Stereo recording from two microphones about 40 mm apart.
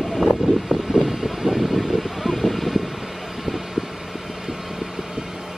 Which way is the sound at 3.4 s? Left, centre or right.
Centre.